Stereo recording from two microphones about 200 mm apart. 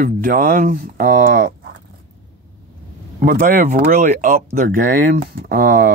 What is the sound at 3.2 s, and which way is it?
Speech, 55° right (ahead or behind).